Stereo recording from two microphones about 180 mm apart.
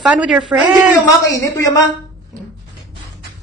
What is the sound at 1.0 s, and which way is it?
Speech, 20° left (ahead or behind).